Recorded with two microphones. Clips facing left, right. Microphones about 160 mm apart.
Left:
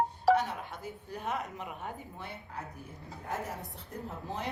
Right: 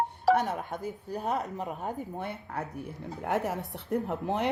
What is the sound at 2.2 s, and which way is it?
A woman's voice, 65° right (ahead or behind).